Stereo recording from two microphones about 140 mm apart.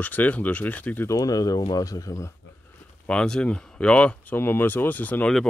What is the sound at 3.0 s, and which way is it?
Speech, 5° left (ahead or behind).